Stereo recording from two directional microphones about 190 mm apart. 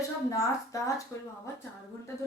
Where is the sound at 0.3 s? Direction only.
15° left (ahead or behind).